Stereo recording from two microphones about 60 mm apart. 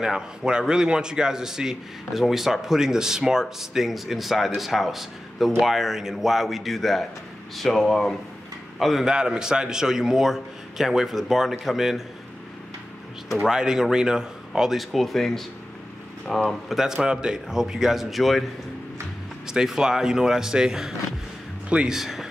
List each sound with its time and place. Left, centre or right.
0.0 s a man's voice: centre
13.4 s a man's voice: centre
16.4 s a man's voice: centre
19.4 s a man's voice: centre
21.9 s speech: centre